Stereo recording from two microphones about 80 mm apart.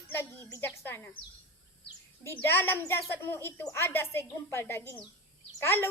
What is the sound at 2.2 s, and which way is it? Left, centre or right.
A woman's voice, left.